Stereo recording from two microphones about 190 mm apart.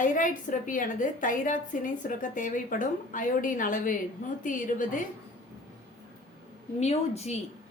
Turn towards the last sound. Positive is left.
turn(degrees=35)  # may be behind; listen again after turning